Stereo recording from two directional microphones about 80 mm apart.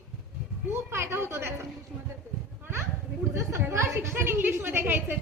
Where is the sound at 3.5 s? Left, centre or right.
Right.